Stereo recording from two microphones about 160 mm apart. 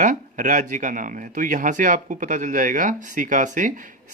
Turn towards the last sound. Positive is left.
turn(degrees=-55)  # may be behind; listen again after turning